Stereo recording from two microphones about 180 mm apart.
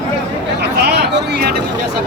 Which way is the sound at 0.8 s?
65° right (ahead or behind).